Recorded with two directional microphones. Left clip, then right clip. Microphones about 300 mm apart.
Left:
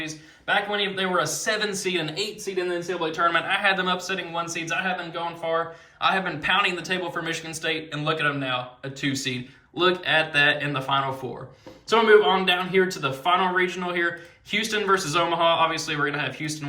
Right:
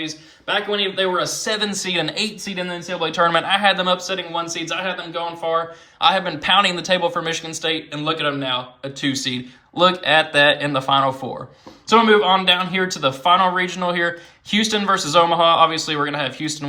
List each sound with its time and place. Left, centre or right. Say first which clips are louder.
0.0 s speech: right 4 dB; centre